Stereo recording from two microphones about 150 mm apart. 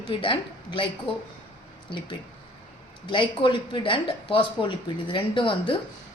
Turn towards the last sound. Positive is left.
turn(degrees=35)  # may be behind; listen again after turning